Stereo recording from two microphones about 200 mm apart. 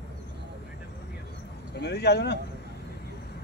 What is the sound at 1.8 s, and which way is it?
Speech, 55° left (ahead or behind).